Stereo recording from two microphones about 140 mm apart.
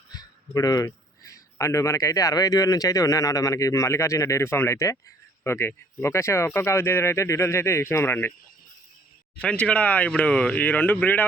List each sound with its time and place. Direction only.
0.1 s speech: 25° left (ahead or behind)
9.4 s speech: 10° left (ahead or behind)